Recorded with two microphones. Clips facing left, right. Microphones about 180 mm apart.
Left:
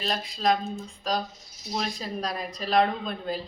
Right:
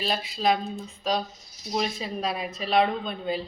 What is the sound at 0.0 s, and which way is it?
A woman's voice, 5° right (ahead or behind).